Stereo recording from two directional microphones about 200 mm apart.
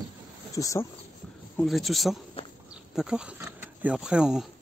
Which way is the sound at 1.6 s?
Centre (ahead or behind).